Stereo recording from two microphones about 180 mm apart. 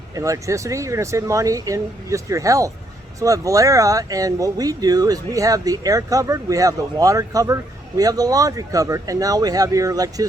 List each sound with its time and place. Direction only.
0.1 s speech: 15° right (ahead or behind)